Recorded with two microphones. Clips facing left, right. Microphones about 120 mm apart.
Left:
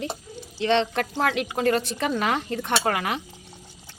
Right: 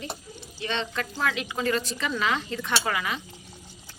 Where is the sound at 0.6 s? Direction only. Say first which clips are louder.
Left 8 dB; 75° left (ahead or behind).